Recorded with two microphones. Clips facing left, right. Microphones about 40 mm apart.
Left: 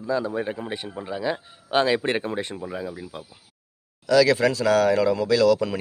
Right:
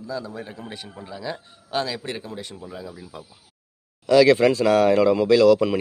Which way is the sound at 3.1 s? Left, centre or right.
Left.